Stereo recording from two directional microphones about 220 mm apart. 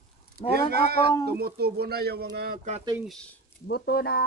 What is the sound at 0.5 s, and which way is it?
Speech, 45° right (ahead or behind).